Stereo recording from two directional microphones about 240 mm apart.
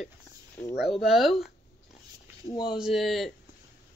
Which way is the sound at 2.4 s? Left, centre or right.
Centre.